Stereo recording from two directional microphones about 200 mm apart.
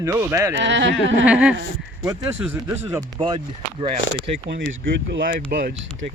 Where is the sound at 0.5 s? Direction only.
60° right (ahead or behind).